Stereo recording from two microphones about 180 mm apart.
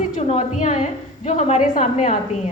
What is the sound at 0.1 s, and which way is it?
A woman's voice, 45° left (ahead or behind).